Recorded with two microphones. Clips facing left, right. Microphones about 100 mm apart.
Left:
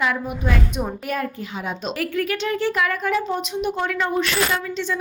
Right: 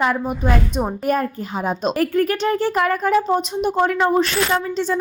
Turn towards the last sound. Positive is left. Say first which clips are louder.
# right 5 dB
turn(degrees=-40)  # may be behind; listen again after turning